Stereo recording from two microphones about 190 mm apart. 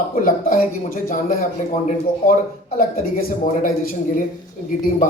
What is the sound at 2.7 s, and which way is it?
A man's voice, 50° left (ahead or behind).